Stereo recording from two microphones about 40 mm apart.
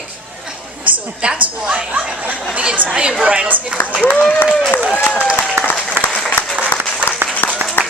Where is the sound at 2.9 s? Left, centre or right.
Right.